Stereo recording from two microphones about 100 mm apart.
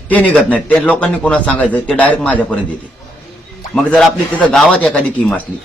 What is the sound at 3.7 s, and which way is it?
A man's voice, 5° left (ahead or behind).